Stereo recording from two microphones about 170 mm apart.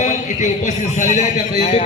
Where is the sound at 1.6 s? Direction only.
35° left (ahead or behind).